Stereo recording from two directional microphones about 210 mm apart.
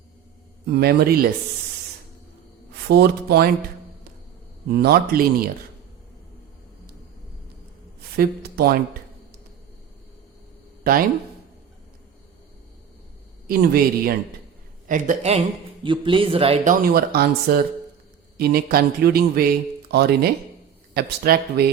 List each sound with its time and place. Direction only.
0.7 s speech: 50° right (ahead or behind)
2.9 s speech: 50° right (ahead or behind)
4.7 s speech: 50° right (ahead or behind)
8.1 s speech: 45° right (ahead or behind)
13.5 s a man's voice: 45° right (ahead or behind)
15.8 s speech: 25° right (ahead or behind)
16.8 s speech: 45° right (ahead or behind)